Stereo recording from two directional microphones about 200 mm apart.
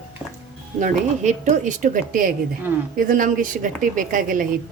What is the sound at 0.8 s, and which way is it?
A woman's voice, 35° right (ahead or behind).